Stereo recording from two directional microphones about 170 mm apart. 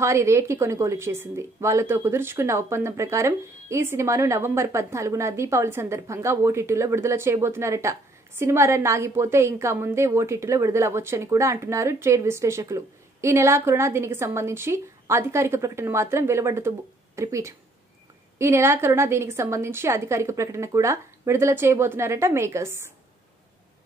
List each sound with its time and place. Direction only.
0.0 s a woman's voice: 15° right (ahead or behind)